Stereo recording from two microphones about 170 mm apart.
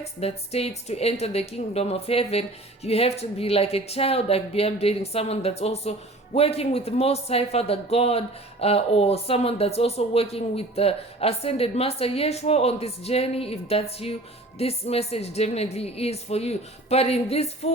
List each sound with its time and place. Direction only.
0.0 s a woman's voice: 35° left (ahead or behind)